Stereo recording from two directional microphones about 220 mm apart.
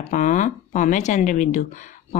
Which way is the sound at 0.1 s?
35° left (ahead or behind).